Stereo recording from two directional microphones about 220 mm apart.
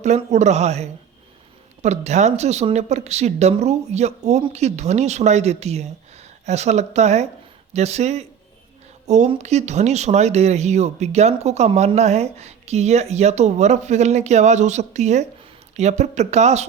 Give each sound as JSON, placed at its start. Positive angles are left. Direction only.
{"t": 0.0, "sound": "speech", "side_deg": -30}